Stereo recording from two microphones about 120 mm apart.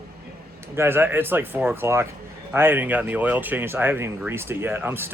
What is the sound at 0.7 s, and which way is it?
Speech, 20° right (ahead or behind).